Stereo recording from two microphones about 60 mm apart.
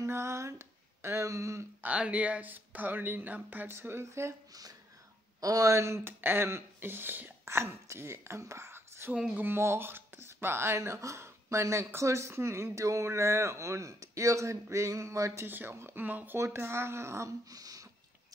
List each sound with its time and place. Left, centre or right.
0.0 s a sound: right
1.8 s speech: right
4.5 s speech: right
7.4 s speech: right
9.3 s speech: right
15.4 s speech: right
16.3 s speech: right
17.5 s a sound: right